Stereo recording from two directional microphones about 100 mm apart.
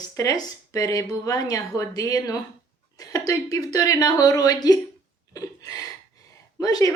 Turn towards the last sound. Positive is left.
turn(degrees=35)  # may be behind; listen again after turning